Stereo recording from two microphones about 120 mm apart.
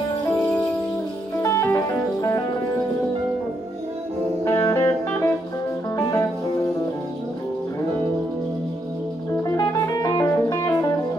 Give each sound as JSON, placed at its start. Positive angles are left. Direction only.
{"t": 1.4, "sound": "music", "side_deg": 25}
{"t": 4.5, "sound": "music", "side_deg": 30}
{"t": 9.4, "sound": "music", "side_deg": 35}